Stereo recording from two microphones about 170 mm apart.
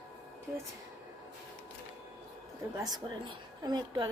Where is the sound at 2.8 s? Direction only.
25° right (ahead or behind).